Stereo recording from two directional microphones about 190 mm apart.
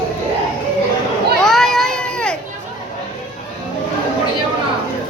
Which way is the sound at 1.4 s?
Centre (ahead or behind).